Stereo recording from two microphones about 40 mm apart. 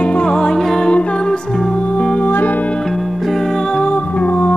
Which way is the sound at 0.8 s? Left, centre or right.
Left.